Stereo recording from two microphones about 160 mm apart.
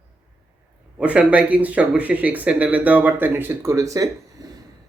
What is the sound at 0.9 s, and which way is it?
Speech, 5° right (ahead or behind).